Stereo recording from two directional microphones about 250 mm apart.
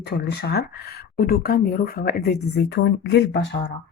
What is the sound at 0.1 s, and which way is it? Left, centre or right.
Speech, left.